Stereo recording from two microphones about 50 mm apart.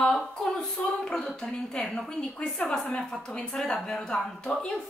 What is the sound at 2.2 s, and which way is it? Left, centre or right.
A woman's voice, centre.